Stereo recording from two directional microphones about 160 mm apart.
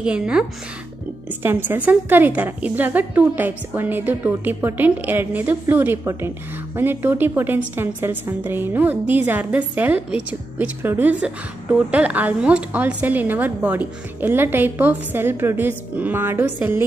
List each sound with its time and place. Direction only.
0.0 s a woman's voice: 5° right (ahead or behind)